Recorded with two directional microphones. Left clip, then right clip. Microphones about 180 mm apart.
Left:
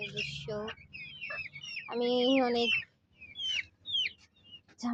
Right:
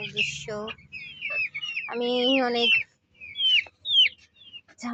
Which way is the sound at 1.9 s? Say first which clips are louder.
Right 4 dB; 10° right (ahead or behind).